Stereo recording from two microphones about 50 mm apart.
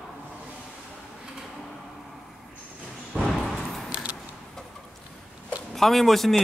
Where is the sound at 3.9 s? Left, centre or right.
Right.